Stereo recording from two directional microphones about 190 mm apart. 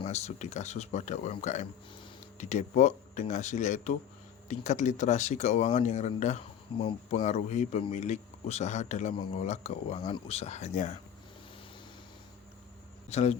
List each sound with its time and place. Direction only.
0.0 s speech: 35° left (ahead or behind)
13.1 s speech: 35° left (ahead or behind)